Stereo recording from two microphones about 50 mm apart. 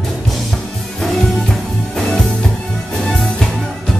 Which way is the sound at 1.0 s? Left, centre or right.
Centre.